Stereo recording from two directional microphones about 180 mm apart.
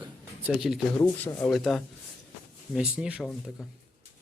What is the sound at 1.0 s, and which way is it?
Speech, 10° left (ahead or behind).